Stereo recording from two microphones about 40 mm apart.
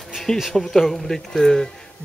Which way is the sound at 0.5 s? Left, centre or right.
Centre.